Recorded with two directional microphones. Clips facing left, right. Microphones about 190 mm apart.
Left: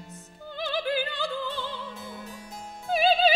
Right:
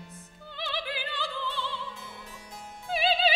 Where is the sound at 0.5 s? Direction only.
45° left (ahead or behind).